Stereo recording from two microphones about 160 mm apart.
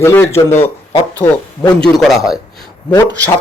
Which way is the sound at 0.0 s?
15° left (ahead or behind).